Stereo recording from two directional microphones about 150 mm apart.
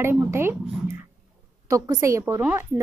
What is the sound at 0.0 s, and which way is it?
A woman's voice, 15° right (ahead or behind).